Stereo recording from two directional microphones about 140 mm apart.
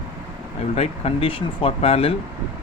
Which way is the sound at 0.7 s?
45° left (ahead or behind).